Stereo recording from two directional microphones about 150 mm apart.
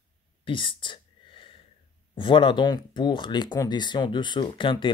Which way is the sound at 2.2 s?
35° left (ahead or behind).